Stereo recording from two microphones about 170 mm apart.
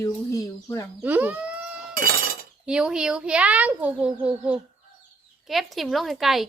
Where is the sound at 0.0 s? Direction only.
20° left (ahead or behind).